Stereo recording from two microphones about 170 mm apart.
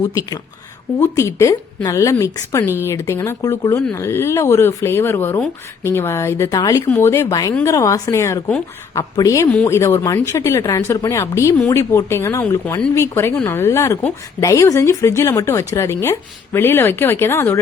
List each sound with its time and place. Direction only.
0.0 s a woman's voice: 20° left (ahead or behind)